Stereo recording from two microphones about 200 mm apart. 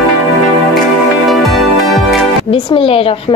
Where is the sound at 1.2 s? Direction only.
Centre (ahead or behind).